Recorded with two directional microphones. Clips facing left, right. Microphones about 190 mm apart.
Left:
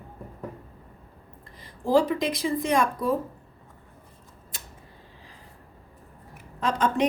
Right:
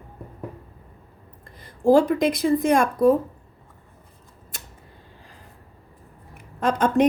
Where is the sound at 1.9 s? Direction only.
50° right (ahead or behind).